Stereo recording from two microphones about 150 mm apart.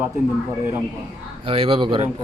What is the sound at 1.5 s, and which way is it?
Speech, 40° right (ahead or behind).